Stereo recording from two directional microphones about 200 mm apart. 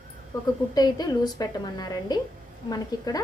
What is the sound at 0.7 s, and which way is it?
A woman's voice, 20° left (ahead or behind).